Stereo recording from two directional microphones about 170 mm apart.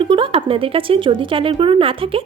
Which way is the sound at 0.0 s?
30° right (ahead or behind).